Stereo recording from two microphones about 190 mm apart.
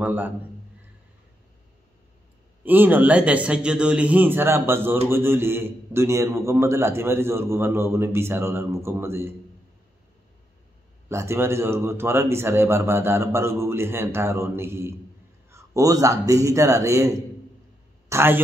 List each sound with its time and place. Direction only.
0.0 s a man's voice: 10° right (ahead or behind)
2.6 s a man's voice: 10° right (ahead or behind)
11.1 s a man's voice: 15° right (ahead or behind)